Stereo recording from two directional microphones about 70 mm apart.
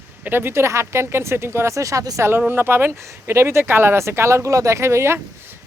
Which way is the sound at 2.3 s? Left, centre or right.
Right.